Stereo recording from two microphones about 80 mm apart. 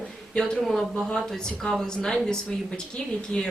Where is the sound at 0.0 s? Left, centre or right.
Centre.